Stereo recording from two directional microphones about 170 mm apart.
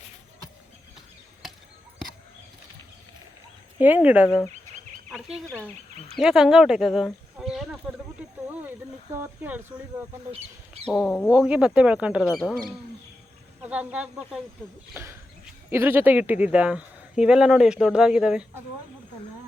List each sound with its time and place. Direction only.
3.8 s speech: 10° right (ahead or behind)
6.1 s a sound: 5° right (ahead or behind)
9.2 s speech: 10° right (ahead or behind)
10.8 s speech: 5° left (ahead or behind)
11.3 s speech: 5° right (ahead or behind)
15.7 s speech: 15° right (ahead or behind)